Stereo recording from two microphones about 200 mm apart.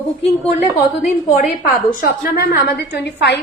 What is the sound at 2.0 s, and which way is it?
A woman's voice, 50° left (ahead or behind).